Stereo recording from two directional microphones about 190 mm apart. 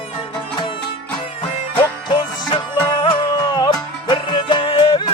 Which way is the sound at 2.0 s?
25° left (ahead or behind).